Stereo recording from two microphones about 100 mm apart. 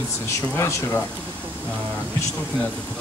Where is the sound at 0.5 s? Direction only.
20° left (ahead or behind).